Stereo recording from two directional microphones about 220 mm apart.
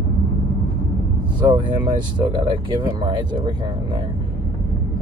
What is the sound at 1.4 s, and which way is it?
Speech, 20° right (ahead or behind).